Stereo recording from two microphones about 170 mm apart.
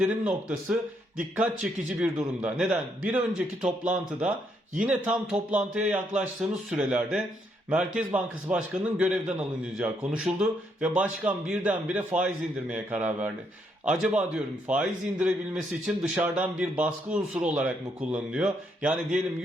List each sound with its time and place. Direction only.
0.0 s a man's voice: 5° right (ahead or behind)
16.0 s speech: 10° right (ahead or behind)